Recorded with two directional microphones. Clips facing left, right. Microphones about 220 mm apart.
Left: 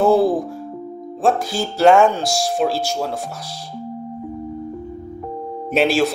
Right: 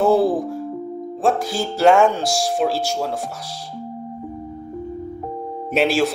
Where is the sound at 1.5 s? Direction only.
10° right (ahead or behind).